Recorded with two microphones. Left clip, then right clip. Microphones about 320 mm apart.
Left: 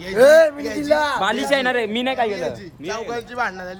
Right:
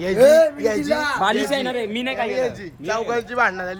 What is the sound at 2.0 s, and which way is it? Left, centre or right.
Speech, left.